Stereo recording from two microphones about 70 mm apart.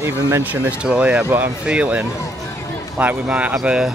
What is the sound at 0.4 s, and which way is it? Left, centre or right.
Speech, right.